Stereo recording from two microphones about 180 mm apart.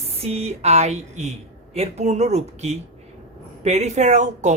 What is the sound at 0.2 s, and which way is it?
Speech, 35° right (ahead or behind).